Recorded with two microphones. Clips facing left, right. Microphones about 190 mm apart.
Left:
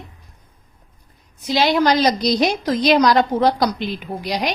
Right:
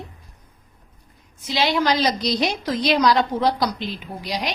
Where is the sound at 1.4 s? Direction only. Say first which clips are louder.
Left 4 dB; 45° left (ahead or behind).